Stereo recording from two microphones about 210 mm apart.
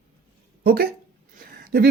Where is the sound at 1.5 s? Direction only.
45° right (ahead or behind).